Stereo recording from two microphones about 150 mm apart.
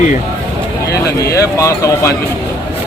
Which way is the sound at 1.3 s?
20° left (ahead or behind).